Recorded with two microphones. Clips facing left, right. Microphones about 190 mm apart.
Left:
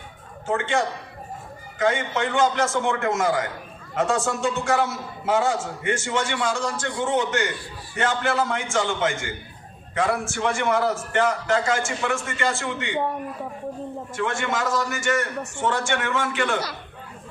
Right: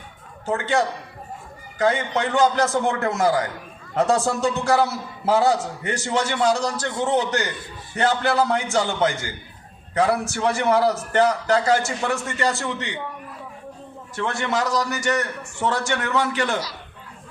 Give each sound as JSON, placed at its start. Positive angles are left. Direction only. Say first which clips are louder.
{"t": 0.4, "sound": "a man's voice", "louder": "right 2 dB", "side_deg": -40}
{"t": 14.2, "sound": "a man's voice", "louder": "right 2 dB", "side_deg": -35}